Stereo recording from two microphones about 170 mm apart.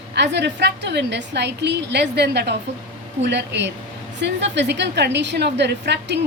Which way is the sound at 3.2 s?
90° right.